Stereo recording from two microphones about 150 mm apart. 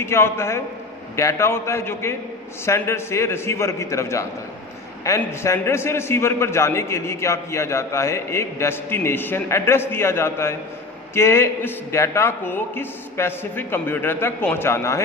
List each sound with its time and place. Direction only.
0.0 s a man's voice: 15° left (ahead or behind)